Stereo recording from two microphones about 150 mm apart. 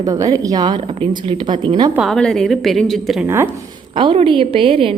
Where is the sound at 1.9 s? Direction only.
Centre (ahead or behind).